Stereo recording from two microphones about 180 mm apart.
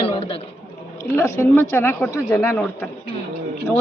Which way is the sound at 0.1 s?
30° left (ahead or behind).